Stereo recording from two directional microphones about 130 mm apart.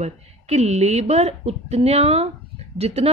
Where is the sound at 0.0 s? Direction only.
55° right (ahead or behind).